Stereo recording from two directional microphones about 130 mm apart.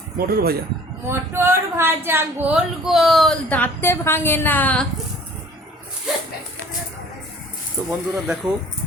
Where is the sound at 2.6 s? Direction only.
Centre (ahead or behind).